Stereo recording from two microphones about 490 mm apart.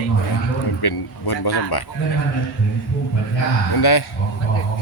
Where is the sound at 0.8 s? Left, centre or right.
Left.